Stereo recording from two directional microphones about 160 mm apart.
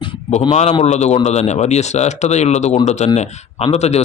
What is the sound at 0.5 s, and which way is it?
Speech, 45° left (ahead or behind).